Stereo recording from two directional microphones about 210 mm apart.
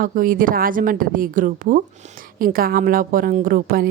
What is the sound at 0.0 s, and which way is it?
A woman's voice, 40° right (ahead or behind).